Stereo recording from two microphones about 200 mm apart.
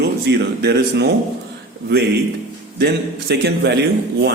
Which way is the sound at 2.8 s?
55° right (ahead or behind).